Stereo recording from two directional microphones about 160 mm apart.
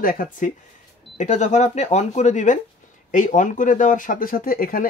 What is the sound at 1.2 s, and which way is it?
Speech, 50° left (ahead or behind).